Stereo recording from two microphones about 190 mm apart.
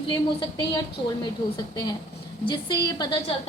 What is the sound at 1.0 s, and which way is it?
Speech, 25° left (ahead or behind).